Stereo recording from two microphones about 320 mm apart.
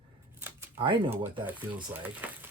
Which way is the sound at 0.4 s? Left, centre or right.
Centre.